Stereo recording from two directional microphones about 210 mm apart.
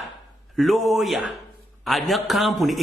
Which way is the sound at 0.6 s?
Centre (ahead or behind).